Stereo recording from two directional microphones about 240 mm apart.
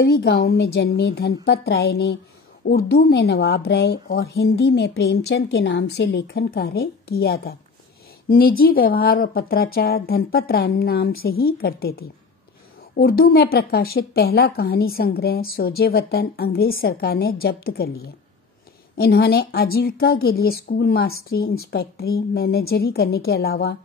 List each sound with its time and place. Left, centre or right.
0.0 s a woman's voice: left
18.9 s a woman's voice: left